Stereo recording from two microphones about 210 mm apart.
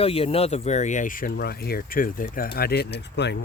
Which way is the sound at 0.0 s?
25° left (ahead or behind).